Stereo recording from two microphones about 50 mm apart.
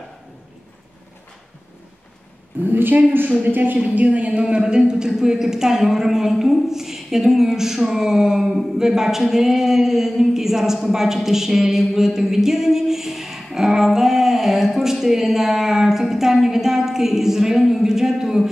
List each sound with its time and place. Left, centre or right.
2.7 s a woman's voice: right; by 18.5 s centre